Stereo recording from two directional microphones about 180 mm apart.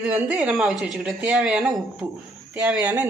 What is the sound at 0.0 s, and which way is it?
A woman's voice, 10° right (ahead or behind).